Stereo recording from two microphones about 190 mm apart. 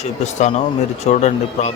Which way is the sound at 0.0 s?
35° left (ahead or behind).